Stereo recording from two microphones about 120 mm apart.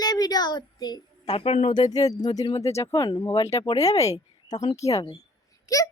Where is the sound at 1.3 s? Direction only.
60° left (ahead or behind).